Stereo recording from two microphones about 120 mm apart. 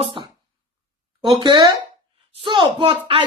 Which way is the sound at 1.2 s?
40° right (ahead or behind).